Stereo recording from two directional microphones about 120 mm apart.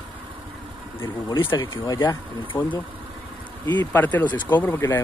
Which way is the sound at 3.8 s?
15° left (ahead or behind).